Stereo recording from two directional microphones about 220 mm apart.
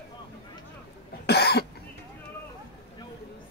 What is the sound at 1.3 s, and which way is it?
Cough, 50° left (ahead or behind).